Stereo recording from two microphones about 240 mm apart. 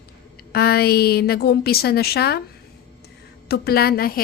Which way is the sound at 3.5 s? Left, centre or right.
Left.